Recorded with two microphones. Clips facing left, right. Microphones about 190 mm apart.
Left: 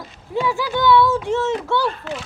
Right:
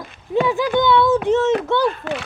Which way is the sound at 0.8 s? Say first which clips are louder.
Even; 20° right (ahead or behind).